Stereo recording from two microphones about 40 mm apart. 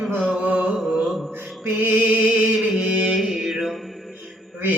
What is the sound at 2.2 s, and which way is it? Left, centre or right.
Music, right.